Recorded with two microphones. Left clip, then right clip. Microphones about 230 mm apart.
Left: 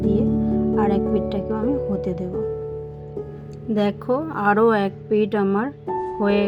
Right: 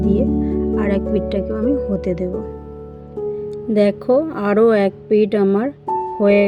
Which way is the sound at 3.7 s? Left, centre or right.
Centre.